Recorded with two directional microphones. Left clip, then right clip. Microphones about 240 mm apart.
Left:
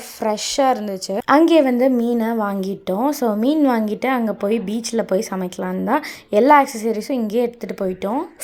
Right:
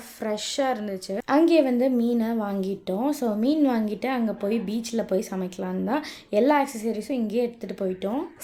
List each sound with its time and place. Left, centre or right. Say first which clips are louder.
0.2 s a woman's voice: left 8 dB; centre